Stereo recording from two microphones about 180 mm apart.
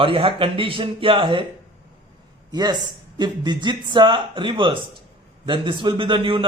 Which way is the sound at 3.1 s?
25° right (ahead or behind).